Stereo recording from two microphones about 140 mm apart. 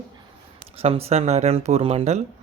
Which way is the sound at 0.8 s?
45° right (ahead or behind).